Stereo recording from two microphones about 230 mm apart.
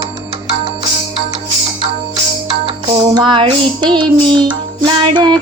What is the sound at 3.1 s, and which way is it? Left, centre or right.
Music, centre.